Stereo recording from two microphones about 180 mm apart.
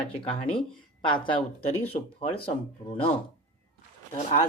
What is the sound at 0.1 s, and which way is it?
Speech, 30° left (ahead or behind).